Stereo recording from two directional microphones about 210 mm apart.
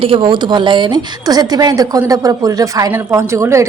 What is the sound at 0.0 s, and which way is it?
A woman's voice, 25° right (ahead or behind).